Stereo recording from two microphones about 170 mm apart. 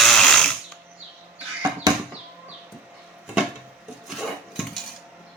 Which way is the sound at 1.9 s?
20° right (ahead or behind).